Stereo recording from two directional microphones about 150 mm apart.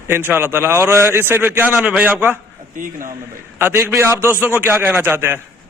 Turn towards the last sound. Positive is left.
turn(degrees=-15)  # may be behind; listen again after turning